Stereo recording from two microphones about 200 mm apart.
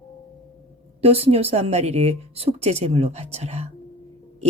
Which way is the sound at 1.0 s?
30° right (ahead or behind).